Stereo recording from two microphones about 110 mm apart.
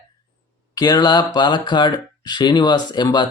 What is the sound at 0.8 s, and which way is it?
Speech, 40° left (ahead or behind).